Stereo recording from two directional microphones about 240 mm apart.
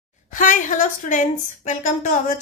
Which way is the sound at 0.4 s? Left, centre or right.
Left.